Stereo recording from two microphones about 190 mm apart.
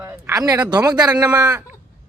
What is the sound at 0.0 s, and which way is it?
Speech, 15° right (ahead or behind).